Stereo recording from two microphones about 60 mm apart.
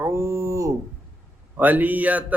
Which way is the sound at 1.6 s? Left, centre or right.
Right.